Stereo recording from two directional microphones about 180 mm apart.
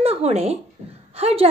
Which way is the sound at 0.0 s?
35° right (ahead or behind).